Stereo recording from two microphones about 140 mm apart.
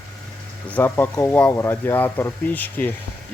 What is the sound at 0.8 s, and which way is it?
Speech, 15° left (ahead or behind).